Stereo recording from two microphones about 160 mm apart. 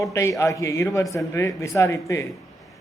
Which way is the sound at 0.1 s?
20° left (ahead or behind).